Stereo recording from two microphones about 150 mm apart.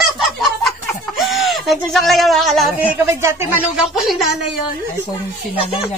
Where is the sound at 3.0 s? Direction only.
20° right (ahead or behind).